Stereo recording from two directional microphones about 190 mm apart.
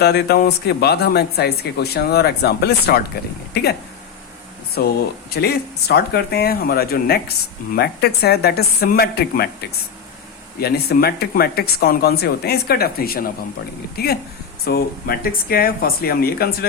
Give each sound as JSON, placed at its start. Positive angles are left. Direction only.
{"t": 0.0, "sound": "a man's voice", "side_deg": 60}
{"t": 4.8, "sound": "a man's voice", "side_deg": 55}